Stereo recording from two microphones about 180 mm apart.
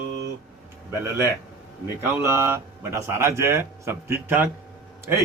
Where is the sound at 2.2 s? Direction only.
15° right (ahead or behind).